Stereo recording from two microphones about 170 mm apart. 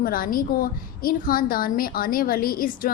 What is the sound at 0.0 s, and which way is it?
A woman's voice, 55° left (ahead or behind).